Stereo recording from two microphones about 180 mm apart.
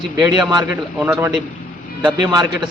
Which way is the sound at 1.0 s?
10° right (ahead or behind).